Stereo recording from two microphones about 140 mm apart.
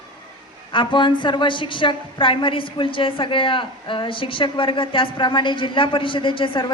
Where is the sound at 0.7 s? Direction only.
35° left (ahead or behind).